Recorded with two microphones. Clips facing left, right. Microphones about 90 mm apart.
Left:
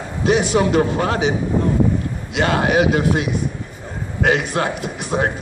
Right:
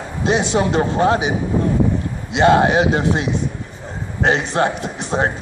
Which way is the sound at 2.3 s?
25° right (ahead or behind).